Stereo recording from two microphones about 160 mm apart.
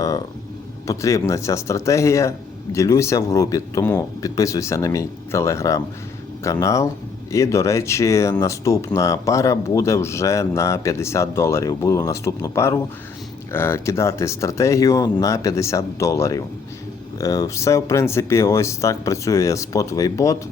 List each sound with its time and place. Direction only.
0.9 s speech: 20° left (ahead or behind)